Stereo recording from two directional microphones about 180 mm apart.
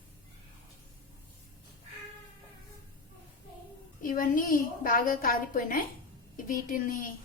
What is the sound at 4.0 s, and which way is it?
A woman's voice, 50° left (ahead or behind).